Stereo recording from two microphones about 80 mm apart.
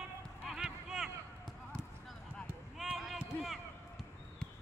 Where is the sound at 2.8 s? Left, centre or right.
Centre.